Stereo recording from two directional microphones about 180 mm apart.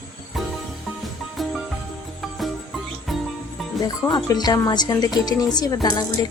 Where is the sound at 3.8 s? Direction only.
20° left (ahead or behind).